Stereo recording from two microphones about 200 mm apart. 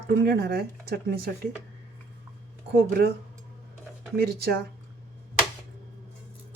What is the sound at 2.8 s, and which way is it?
Speech, 50° right (ahead or behind).